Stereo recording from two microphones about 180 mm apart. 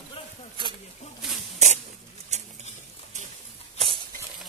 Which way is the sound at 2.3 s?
40° right (ahead or behind).